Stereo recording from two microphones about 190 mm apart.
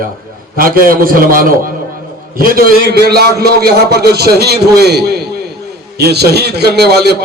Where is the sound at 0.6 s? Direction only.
50° right (ahead or behind).